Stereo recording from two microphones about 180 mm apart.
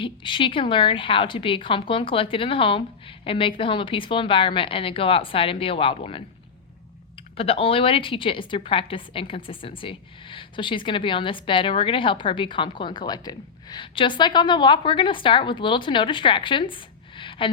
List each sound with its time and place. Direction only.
0.0 s a woman's voice: 25° left (ahead or behind)
7.3 s a woman's voice: 30° left (ahead or behind)
17.2 s a sound: 30° left (ahead or behind)